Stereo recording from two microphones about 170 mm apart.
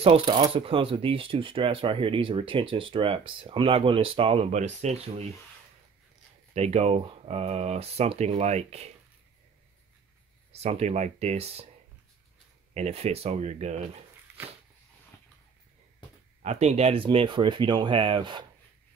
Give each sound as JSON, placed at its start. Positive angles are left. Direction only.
{"t": 0.0, "sound": "speech", "side_deg": -30}
{"t": 6.5, "sound": "speech", "side_deg": -40}
{"t": 10.5, "sound": "speech", "side_deg": -40}
{"t": 12.7, "sound": "speech", "side_deg": -40}
{"t": 14.3, "sound": "a sound", "side_deg": -10}
{"t": 16.4, "sound": "speech", "side_deg": -40}